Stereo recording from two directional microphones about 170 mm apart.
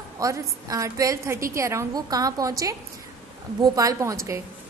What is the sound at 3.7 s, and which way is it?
Speech, 20° right (ahead or behind).